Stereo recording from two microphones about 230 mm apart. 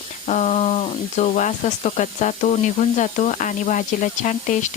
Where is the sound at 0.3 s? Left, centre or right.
Left.